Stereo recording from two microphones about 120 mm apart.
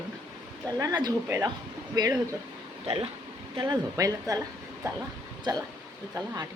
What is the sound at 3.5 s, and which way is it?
Speech, 40° right (ahead or behind).